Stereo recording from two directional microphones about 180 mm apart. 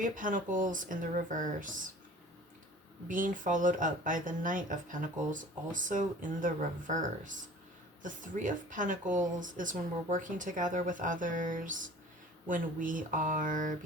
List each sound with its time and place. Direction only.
0.0 s speech: 50° right (ahead or behind)
3.1 s speech: 45° right (ahead or behind)